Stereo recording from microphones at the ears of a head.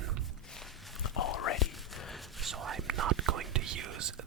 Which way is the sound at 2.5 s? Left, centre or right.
Right.